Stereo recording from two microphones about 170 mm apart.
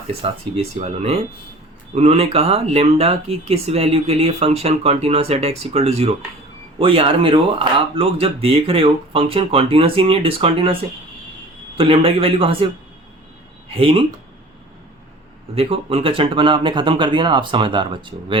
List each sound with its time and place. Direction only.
0.2 s speech: 35° right (ahead or behind)
11.8 s speech: 35° right (ahead or behind)
13.7 s speech: 35° right (ahead or behind)
15.5 s speech: 35° right (ahead or behind)